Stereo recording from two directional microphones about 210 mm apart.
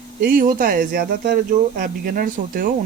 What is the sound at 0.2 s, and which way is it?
Speech, 45° right (ahead or behind).